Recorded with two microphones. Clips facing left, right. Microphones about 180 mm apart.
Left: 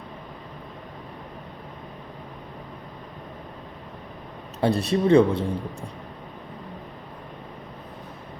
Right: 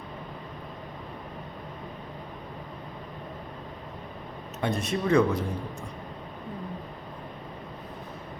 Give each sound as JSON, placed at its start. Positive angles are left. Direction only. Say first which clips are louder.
{"t": 4.6, "sound": "speech", "louder": "left 7 dB", "side_deg": 35}